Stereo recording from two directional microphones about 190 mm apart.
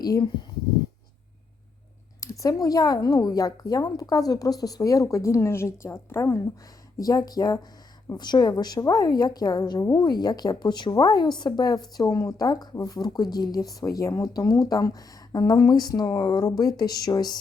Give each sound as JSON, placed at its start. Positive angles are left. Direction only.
{"t": 0.0, "sound": "speech", "side_deg": 20}
{"t": 2.2, "sound": "a woman's voice", "side_deg": 15}